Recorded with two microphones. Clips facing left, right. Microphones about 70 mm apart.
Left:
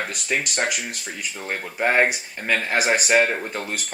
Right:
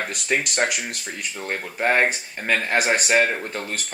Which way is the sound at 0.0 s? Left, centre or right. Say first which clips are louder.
Right 1 dB; centre.